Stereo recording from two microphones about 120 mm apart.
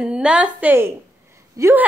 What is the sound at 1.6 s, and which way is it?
Speech, 25° right (ahead or behind).